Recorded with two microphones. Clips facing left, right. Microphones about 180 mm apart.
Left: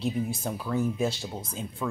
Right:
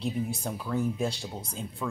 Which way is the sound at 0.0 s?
Centre (ahead or behind).